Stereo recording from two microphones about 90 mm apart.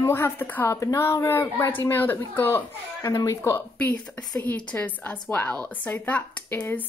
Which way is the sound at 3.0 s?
35° left (ahead or behind).